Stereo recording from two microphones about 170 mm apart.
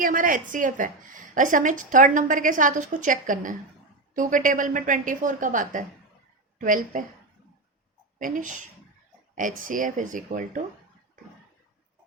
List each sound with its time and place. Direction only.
0.0 s a woman's voice: 55° right (ahead or behind)
8.2 s a woman's voice: 50° right (ahead or behind)